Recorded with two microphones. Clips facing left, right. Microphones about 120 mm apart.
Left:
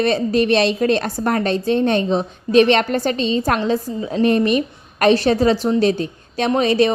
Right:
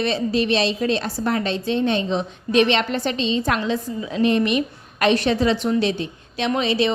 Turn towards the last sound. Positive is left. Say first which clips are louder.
# left 5 dB
turn(degrees=45)  # may be behind; listen again after turning